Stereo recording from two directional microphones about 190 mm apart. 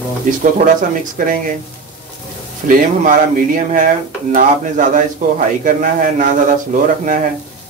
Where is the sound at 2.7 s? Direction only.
45° right (ahead or behind).